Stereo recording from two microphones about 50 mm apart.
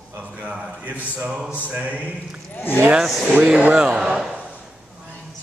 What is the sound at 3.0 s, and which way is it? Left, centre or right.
Speech, centre.